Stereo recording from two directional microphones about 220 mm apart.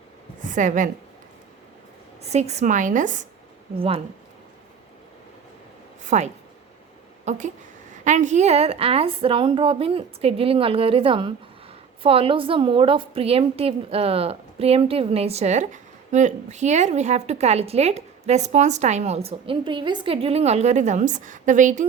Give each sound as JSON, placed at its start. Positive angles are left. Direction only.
{"t": 0.4, "sound": "a woman's voice", "side_deg": -35}
{"t": 2.2, "sound": "a woman's voice", "side_deg": -30}
{"t": 6.1, "sound": "a woman's voice", "side_deg": -30}